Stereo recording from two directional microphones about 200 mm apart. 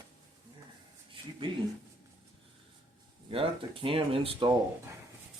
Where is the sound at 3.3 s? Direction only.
25° right (ahead or behind).